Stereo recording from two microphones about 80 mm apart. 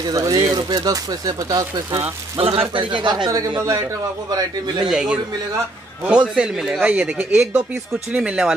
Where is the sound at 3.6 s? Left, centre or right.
Right.